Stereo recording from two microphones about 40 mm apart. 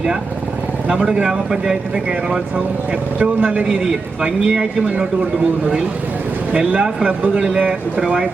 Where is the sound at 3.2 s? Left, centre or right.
Right.